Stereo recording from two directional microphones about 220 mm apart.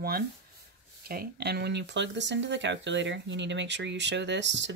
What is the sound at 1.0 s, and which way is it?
Speech, 45° right (ahead or behind).